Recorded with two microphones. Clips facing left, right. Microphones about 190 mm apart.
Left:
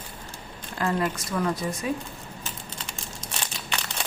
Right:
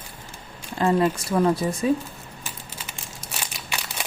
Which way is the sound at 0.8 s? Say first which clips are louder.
Right 6 dB; 25° right (ahead or behind).